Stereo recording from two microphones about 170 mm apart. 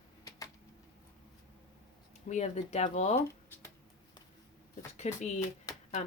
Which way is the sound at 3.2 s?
15° left (ahead or behind).